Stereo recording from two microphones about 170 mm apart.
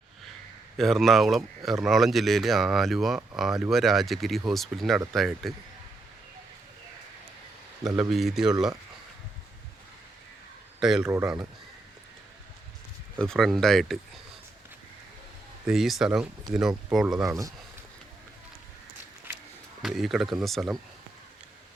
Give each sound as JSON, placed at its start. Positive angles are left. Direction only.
{"t": 0.8, "sound": "speech", "side_deg": 0}
{"t": 7.9, "sound": "speech", "side_deg": 0}
{"t": 10.8, "sound": "speech", "side_deg": -5}
{"t": 11.0, "sound": "speech", "side_deg": -15}
{"t": 13.1, "sound": "speech", "side_deg": 5}
{"t": 15.6, "sound": "speech", "side_deg": 0}
{"t": 17.2, "sound": "speech", "side_deg": -20}
{"t": 19.8, "sound": "speech", "side_deg": 0}